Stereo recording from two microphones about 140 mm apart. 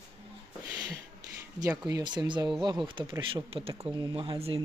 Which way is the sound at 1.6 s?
20° right (ahead or behind).